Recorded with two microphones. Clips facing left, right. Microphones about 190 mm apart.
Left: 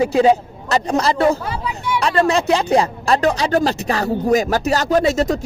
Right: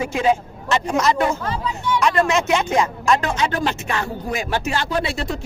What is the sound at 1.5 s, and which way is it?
Speech, 10° left (ahead or behind).